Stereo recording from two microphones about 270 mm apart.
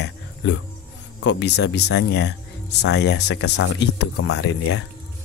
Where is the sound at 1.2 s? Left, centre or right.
Left.